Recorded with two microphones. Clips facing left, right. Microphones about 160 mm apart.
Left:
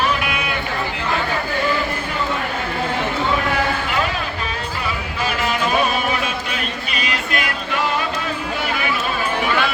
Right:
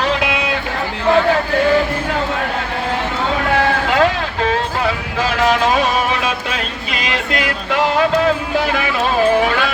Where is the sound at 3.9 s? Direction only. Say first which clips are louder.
Right 7 dB; 90° right.